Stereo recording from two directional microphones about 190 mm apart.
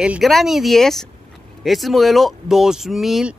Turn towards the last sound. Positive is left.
turn(degrees=0)  # may be behind; listen again after turning